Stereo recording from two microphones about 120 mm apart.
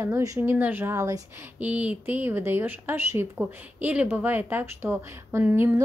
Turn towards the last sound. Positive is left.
turn(degrees=-15)  # may be behind; listen again after turning